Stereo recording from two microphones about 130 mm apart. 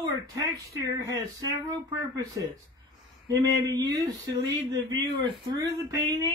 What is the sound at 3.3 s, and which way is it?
Speech, 25° right (ahead or behind).